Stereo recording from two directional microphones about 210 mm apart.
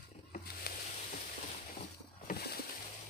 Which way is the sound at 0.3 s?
45° left (ahead or behind).